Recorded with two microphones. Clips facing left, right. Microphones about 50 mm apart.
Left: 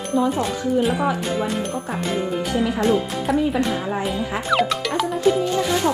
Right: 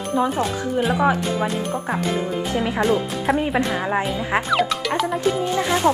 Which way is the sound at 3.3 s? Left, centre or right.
Right.